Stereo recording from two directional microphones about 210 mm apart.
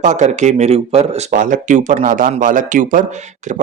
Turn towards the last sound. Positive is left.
turn(degrees=-35)  # may be behind; listen again after turning